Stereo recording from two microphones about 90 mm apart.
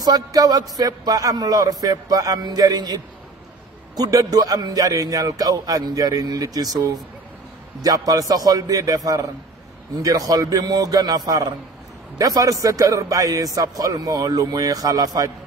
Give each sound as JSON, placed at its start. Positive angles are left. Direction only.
{"t": 0.0, "sound": "a man's voice", "side_deg": -45}
{"t": 7.8, "sound": "a man's voice", "side_deg": -45}